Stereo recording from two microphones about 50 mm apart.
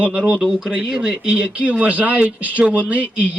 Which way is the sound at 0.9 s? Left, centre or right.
Centre.